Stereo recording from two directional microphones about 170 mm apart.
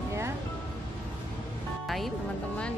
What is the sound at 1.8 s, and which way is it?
Speech, centre (ahead or behind).